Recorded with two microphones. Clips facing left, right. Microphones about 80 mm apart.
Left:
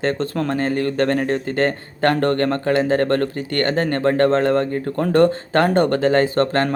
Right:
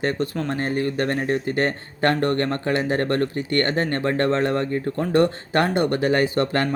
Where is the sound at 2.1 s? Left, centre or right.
Left.